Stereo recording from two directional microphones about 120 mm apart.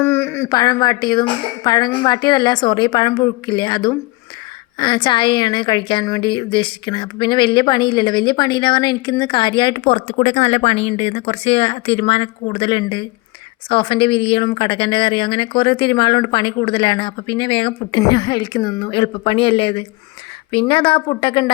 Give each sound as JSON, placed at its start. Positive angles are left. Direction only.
{"t": 0.0, "sound": "a sound", "side_deg": 20}
{"t": 0.5, "sound": "a woman's voice", "side_deg": 30}
{"t": 9.8, "sound": "speech", "side_deg": 65}
{"t": 18.0, "sound": "speech", "side_deg": 35}